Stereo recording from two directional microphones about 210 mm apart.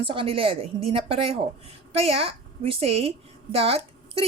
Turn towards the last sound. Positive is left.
turn(degrees=-30)  # may be behind; listen again after turning